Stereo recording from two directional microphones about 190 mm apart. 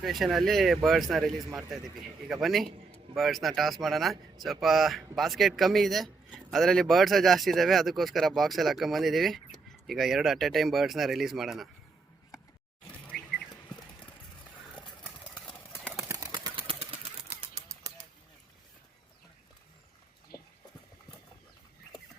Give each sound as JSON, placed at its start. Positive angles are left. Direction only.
{"t": 0.0, "sound": "speech", "side_deg": 0}
{"t": 12.9, "sound": "bird", "side_deg": 5}
{"t": 15.4, "sound": "horse", "side_deg": 5}
{"t": 16.3, "sound": "a sound", "side_deg": -25}